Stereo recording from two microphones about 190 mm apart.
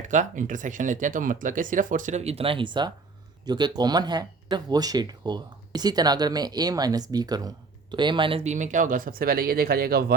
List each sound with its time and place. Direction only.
0.1 s speech: 40° right (ahead or behind)